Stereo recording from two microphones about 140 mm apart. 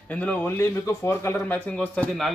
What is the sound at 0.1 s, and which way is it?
A man's voice, 10° left (ahead or behind).